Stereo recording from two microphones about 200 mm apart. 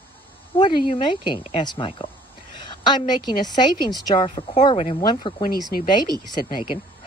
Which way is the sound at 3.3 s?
20° left (ahead or behind).